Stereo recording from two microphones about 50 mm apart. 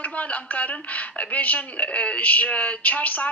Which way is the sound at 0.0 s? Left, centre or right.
Left.